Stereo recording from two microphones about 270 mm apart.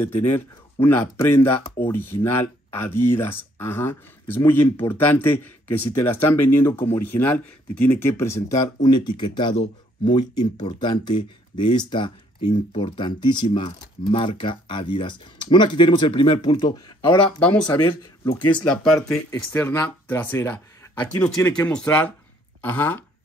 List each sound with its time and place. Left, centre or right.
0.0 s speech: centre
18.2 s speech: centre
18.7 s speech: centre